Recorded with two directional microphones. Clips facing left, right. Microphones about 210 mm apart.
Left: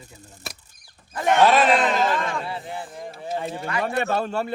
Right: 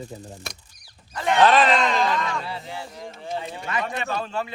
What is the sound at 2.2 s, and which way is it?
Speech, 50° left (ahead or behind).